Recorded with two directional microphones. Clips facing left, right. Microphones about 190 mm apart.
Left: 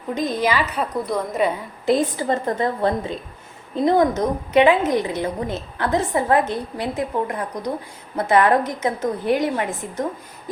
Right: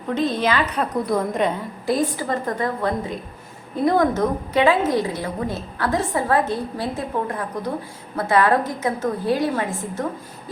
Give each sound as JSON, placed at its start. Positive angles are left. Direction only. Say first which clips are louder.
{"t": 0.1, "sound": "a woman's voice", "louder": "right 1 dB", "side_deg": 10}
{"t": 1.9, "sound": "a woman's voice", "louder": "left 3 dB", "side_deg": 25}